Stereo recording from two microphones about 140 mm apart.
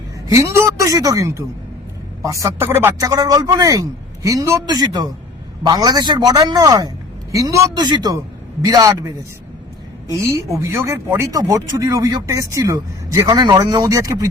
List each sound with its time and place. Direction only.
0.3 s speech: 20° right (ahead or behind)